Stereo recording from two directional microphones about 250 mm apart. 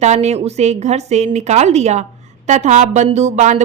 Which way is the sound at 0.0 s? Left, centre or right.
Right.